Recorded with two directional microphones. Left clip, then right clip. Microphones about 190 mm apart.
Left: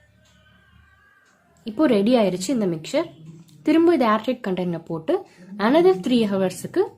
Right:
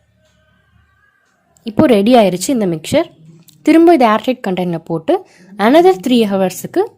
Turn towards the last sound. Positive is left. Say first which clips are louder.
# right 7 dB
turn(degrees=-35)  # may be behind; listen again after turning